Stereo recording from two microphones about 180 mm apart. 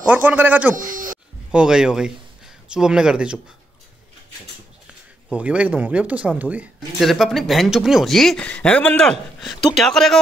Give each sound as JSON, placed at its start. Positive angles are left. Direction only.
{"t": 0.0, "sound": "a man's voice", "side_deg": -10}
{"t": 5.3, "sound": "speech", "side_deg": -5}